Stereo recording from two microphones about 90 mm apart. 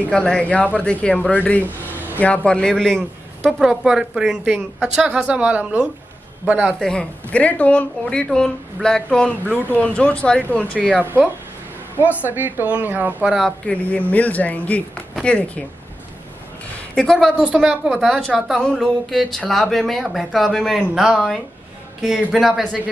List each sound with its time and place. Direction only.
0.1 s speech: 10° left (ahead or behind)
5.0 s a woman's voice: 10° right (ahead or behind)
6.8 s speech: 10° left (ahead or behind)
12.3 s a woman's voice: 20° right (ahead or behind)
13.4 s speech: 15° left (ahead or behind)
16.9 s speech: 10° left (ahead or behind)
17.4 s a woman's voice: 10° right (ahead or behind)
17.9 s speech: 5° left (ahead or behind)